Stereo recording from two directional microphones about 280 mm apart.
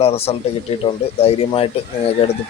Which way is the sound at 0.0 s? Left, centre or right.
Left.